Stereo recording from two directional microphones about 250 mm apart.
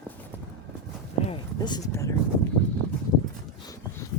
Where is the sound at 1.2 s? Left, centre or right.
Centre.